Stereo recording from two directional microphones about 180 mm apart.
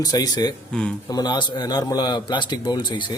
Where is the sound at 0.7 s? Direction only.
5° left (ahead or behind).